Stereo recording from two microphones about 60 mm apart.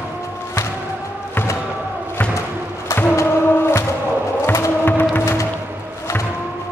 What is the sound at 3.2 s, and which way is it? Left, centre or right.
Music, left.